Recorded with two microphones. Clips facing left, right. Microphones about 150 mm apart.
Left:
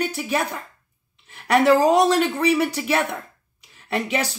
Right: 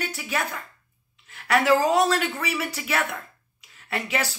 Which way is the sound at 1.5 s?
35° left (ahead or behind).